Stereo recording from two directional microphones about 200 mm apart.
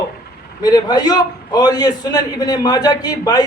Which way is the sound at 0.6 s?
20° left (ahead or behind).